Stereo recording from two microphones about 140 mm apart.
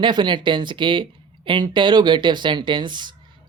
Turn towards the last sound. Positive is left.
turn(degrees=-35)  # may be behind; listen again after turning